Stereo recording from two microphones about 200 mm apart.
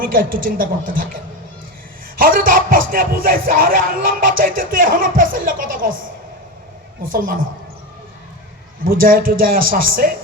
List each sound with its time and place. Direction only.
0.0 s music: 45° right (ahead or behind)
7.1 s music: 45° right (ahead or behind)
8.8 s music: 45° right (ahead or behind)